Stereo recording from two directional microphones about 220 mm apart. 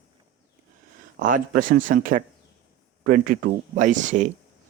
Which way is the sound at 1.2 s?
40° right (ahead or behind).